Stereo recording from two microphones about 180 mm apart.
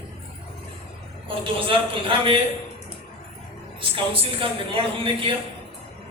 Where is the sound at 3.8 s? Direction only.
30° right (ahead or behind).